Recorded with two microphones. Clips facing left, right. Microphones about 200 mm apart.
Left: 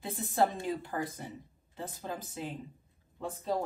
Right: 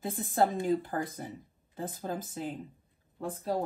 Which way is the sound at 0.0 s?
50° right (ahead or behind).